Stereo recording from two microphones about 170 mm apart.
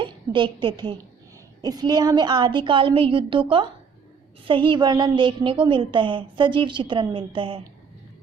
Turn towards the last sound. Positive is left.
turn(degrees=-30)  # may be behind; listen again after turning